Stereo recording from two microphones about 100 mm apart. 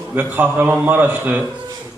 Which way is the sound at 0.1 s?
20° right (ahead or behind).